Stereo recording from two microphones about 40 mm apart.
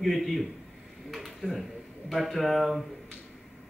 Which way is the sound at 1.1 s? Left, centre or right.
Centre.